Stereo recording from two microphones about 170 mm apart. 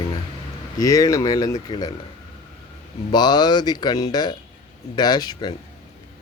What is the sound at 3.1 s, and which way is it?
Speech, 25° left (ahead or behind).